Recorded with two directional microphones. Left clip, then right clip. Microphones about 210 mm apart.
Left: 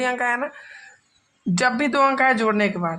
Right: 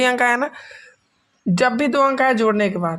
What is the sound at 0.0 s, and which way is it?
Speech, 35° right (ahead or behind).